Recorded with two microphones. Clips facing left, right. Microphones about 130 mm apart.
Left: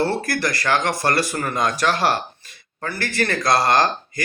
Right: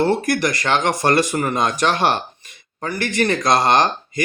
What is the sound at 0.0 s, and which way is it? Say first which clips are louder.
Speech: right 4 dB; 20° right (ahead or behind).